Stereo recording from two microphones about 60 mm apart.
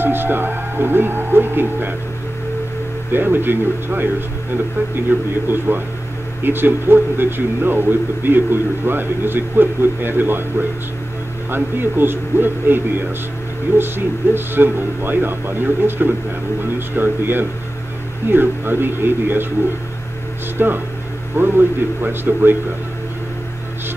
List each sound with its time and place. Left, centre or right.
0.0 s speech: right
3.1 s a man's voice: right
5.1 s a man's voice: right
20.5 s a man's voice: right